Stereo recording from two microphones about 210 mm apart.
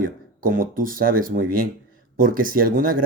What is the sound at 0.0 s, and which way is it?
Speech, 40° right (ahead or behind).